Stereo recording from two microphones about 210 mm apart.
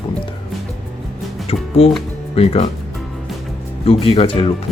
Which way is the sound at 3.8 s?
25° left (ahead or behind).